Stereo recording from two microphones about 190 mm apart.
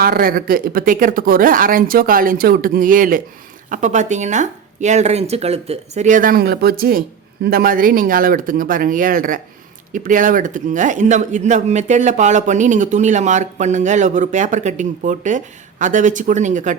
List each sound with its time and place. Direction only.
0.0 s speech: 50° right (ahead or behind)